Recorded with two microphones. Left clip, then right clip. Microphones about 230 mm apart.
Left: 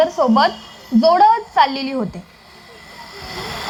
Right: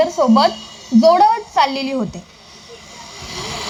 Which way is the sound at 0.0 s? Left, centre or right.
Right.